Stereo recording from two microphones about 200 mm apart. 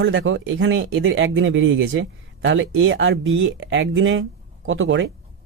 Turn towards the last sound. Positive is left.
turn(degrees=-70)  # may be behind; listen again after turning